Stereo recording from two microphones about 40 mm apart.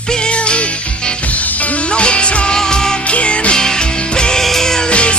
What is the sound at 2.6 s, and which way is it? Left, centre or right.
Music, centre.